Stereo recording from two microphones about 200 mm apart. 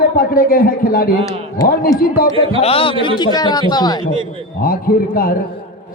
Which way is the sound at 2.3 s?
25° right (ahead or behind).